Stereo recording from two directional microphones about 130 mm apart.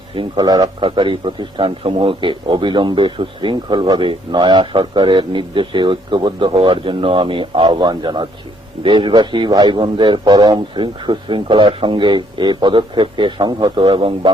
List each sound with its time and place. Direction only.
0.1 s a man's voice: 40° right (ahead or behind)